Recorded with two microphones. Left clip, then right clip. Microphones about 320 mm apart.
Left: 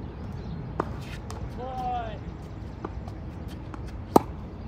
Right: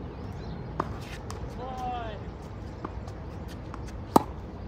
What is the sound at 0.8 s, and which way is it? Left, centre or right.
Walk, centre.